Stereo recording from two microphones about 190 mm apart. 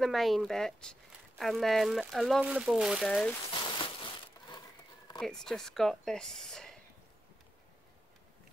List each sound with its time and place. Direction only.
0.0 s speech: centre (ahead or behind)
3.7 s crushing: 25° left (ahead or behind)
5.2 s speech: 5° left (ahead or behind)